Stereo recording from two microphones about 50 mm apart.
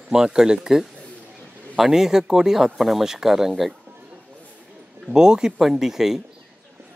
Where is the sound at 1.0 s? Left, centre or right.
Left.